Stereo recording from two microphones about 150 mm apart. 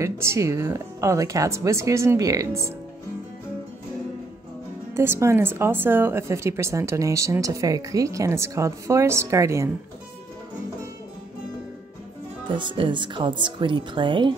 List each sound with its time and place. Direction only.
0.0 s speech: 20° right (ahead or behind)
4.9 s speech: 15° right (ahead or behind)
12.4 s speech: 30° right (ahead or behind)